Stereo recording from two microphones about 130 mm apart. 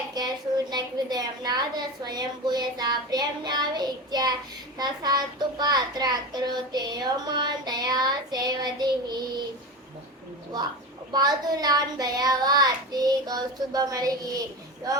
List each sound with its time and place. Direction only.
0.2 s a sound: 30° right (ahead or behind)
0.7 s a child's voice: 30° right (ahead or behind)
11.1 s a child's voice: 30° right (ahead or behind)